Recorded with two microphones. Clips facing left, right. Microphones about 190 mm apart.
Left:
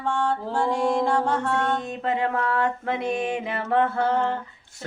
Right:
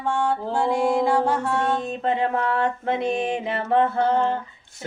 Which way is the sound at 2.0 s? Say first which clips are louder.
Right 2 dB; 25° right (ahead or behind).